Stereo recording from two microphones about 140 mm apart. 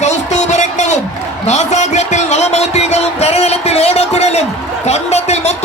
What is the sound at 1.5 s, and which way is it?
Music, 55° left (ahead or behind).